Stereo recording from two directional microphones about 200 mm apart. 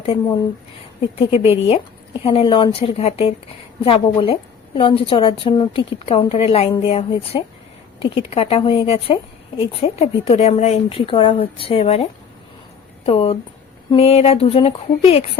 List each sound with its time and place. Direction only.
1.1 s a woman's voice: 30° left (ahead or behind)
13.1 s a woman's voice: 30° left (ahead or behind)